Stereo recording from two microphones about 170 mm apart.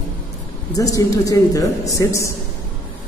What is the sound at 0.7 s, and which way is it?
A man's voice, 20° left (ahead or behind).